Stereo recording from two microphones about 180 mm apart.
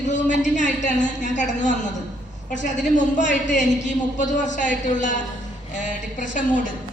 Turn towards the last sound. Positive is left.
turn(degrees=45)  # may be behind; listen again after turning